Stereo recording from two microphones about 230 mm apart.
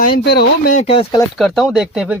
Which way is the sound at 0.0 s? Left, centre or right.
Left.